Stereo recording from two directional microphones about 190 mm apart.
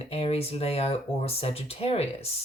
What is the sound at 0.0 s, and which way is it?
Speech, 30° left (ahead or behind).